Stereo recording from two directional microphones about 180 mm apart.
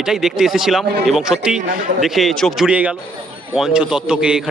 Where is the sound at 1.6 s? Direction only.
50° right (ahead or behind).